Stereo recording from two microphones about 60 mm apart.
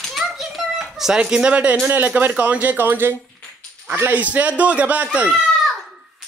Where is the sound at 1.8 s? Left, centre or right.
Right.